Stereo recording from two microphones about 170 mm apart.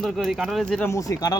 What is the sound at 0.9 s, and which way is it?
Speech, 20° left (ahead or behind).